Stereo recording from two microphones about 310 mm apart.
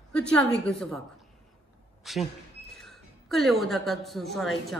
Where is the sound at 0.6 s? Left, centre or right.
Centre.